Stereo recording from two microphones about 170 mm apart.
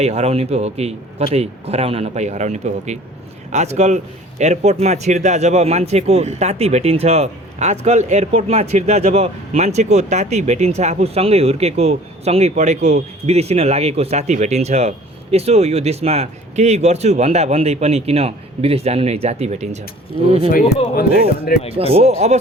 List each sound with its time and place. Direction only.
0.0 s a man's voice: 40° right (ahead or behind)
21.8 s a man's voice: 35° right (ahead or behind)